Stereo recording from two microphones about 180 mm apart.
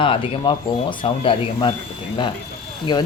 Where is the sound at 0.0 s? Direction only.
30° left (ahead or behind).